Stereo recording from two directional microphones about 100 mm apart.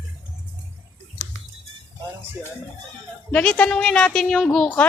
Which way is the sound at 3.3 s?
10° left (ahead or behind).